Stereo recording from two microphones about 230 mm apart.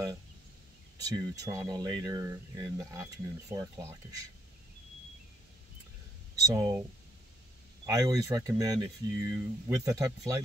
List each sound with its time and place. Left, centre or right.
1.0 s speech: centre
6.4 s speech: centre
7.8 s speech: centre